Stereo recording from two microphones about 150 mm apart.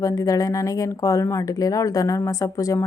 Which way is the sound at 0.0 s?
25° left (ahead or behind).